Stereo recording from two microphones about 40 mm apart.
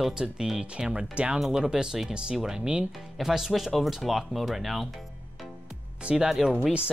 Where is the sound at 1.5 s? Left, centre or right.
Centre.